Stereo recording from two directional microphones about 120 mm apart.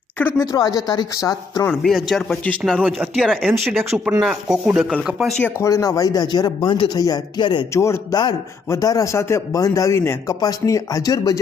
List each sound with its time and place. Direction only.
0.5 s speech: 30° left (ahead or behind)
1.8 s speech: centre (ahead or behind)
2.4 s speech: 10° left (ahead or behind)
3.2 s speech: centre (ahead or behind)
4.7 s speech: 15° right (ahead or behind)
5.0 s speech: centre (ahead or behind)
5.4 s speech: 25° left (ahead or behind)
7.7 s a man's voice: 25° left (ahead or behind)